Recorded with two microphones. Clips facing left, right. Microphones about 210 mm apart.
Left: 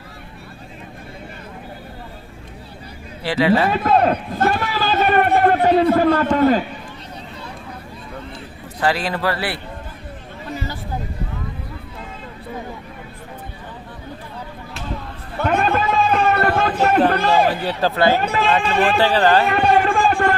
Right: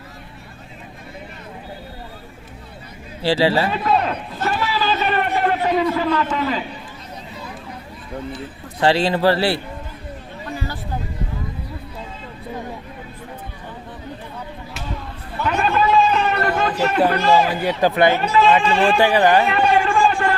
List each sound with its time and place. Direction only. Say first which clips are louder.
3.2 s a man's voice: left 1 dB; 30° right (ahead or behind)
3.7 s a man's voice: left 3 dB; 50° left (ahead or behind)
4.4 s a sound: left 2 dB; 50° left (ahead or behind)
8.8 s a man's voice: right 4 dB; 25° right (ahead or behind)
15.4 s a sound: left 1 dB; 55° left (ahead or behind)
17.2 s a man's voice: even; 55° left (ahead or behind)
17.6 s speech: right 2 dB; 15° right (ahead or behind)
18.2 s a man's voice: right 4 dB; 55° left (ahead or behind)
18.9 s speech: even; 15° right (ahead or behind)
19.5 s a sound: left 1 dB; 55° left (ahead or behind)